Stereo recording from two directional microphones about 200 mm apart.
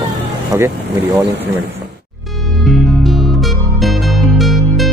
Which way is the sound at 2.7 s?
Centre (ahead or behind).